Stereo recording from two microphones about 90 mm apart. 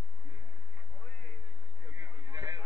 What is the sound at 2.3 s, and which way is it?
Chatter, 55° right (ahead or behind).